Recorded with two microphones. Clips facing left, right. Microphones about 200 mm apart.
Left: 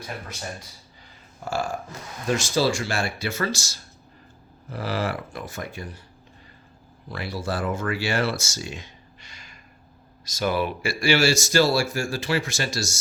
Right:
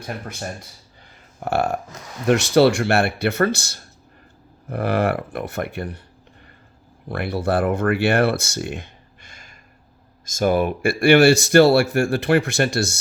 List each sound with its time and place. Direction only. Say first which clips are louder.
0.0 s speech: right 5 dB; 55° right (ahead or behind)
7.1 s speech: right 8 dB; 55° right (ahead or behind)